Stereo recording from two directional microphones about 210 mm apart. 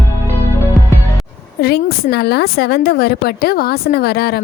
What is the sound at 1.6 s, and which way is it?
Speech, 50° left (ahead or behind).